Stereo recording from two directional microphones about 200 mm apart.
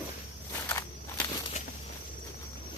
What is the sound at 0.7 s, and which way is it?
Walk, 10° left (ahead or behind).